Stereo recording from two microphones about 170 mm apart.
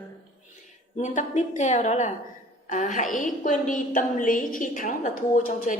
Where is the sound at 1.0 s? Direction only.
45° left (ahead or behind).